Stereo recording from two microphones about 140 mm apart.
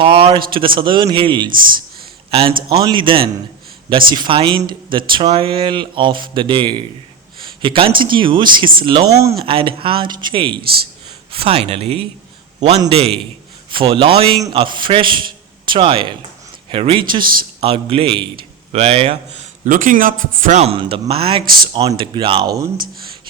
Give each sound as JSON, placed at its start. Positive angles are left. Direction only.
{"t": 0.0, "sound": "speech", "side_deg": -40}
{"t": 1.5, "sound": "speech", "side_deg": -85}
{"t": 2.3, "sound": "speech", "side_deg": -40}
{"t": 9.0, "sound": "speech", "side_deg": -20}
{"t": 9.4, "sound": "a man's voice", "side_deg": -40}
{"t": 19.7, "sound": "speech", "side_deg": -75}
{"t": 20.6, "sound": "speech", "side_deg": -40}